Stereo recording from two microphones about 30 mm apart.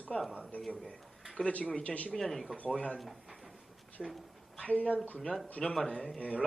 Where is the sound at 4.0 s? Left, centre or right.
Centre.